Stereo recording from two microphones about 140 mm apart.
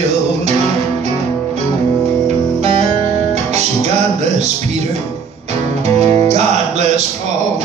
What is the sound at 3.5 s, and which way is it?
Music, 55° right (ahead or behind).